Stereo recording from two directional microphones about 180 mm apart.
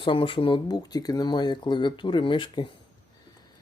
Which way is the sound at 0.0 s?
25° left (ahead or behind).